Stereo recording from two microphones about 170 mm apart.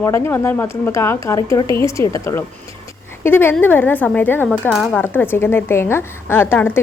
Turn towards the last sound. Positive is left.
turn(degrees=10)  # may be behind; listen again after turning